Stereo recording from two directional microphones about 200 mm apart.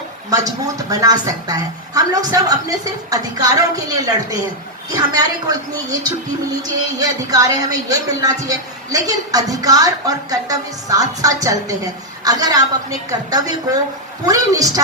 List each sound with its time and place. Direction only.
0.3 s a woman's voice: 20° right (ahead or behind)